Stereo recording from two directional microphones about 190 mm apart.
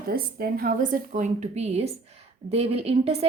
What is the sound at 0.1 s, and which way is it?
A woman's voice, 50° right (ahead or behind).